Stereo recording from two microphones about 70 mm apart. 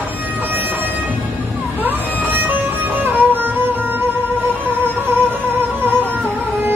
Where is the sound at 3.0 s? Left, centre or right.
Right.